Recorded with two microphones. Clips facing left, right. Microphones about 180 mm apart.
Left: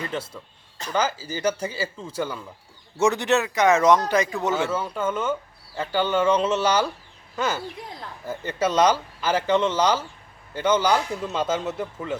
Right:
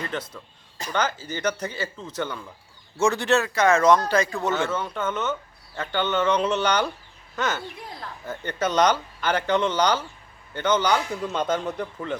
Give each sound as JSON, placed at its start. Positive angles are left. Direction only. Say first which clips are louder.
{"t": 0.1, "sound": "speech", "louder": "left 1 dB", "side_deg": 10}
{"t": 3.0, "sound": "speech", "louder": "left 1 dB", "side_deg": 20}
{"t": 4.5, "sound": "a man's voice", "louder": "left 1 dB", "side_deg": 10}